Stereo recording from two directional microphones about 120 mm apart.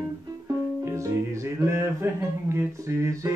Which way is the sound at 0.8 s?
25° right (ahead or behind).